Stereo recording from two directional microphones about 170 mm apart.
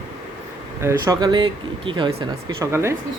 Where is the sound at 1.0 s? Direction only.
25° right (ahead or behind).